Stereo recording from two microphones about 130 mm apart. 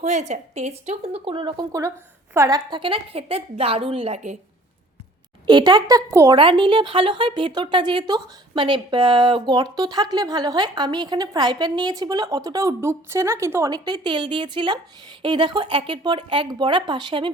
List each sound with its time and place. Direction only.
0.0 s a woman's voice: 65° right (ahead or behind); by 1.6 s 40° right (ahead or behind)
2.3 s a woman's voice: 25° right (ahead or behind)
2.6 s a woman's voice: 40° right (ahead or behind)
5.5 s speech: 35° right (ahead or behind)
6.1 s a woman's voice: 20° right (ahead or behind)
6.3 s speech: 40° right (ahead or behind)